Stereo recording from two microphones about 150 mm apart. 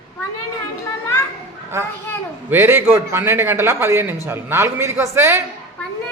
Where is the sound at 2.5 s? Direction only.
15° right (ahead or behind).